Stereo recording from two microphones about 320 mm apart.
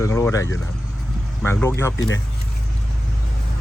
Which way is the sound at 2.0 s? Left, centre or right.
Left.